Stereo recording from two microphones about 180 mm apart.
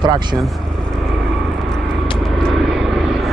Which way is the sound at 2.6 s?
Centre (ahead or behind).